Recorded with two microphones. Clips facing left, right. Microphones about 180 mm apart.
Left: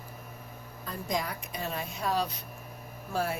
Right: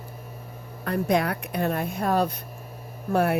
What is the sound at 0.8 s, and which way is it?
Speech, 70° right (ahead or behind).